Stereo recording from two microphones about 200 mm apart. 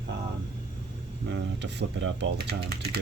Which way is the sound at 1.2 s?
60° right (ahead or behind).